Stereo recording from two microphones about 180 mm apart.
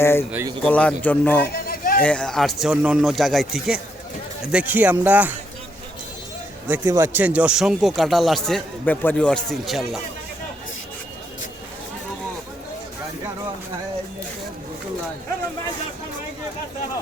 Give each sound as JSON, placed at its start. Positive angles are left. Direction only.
{"t": 0.0, "sound": "speech", "side_deg": 15}
{"t": 1.5, "sound": "a sound", "side_deg": 55}
{"t": 2.0, "sound": "a man's voice", "side_deg": 5}
{"t": 6.7, "sound": "a man's voice", "side_deg": -10}